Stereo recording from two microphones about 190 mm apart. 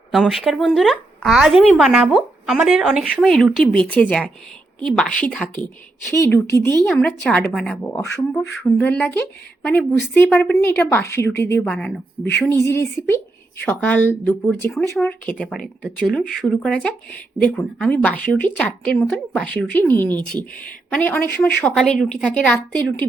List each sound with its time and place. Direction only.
0.1 s speech: centre (ahead or behind)